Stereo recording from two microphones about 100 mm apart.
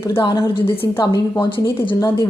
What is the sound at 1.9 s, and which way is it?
Speech, 35° left (ahead or behind).